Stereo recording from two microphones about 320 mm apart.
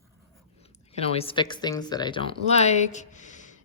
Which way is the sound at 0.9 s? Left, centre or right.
Centre.